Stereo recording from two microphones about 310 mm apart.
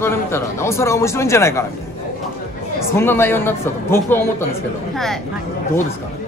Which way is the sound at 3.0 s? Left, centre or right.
Centre.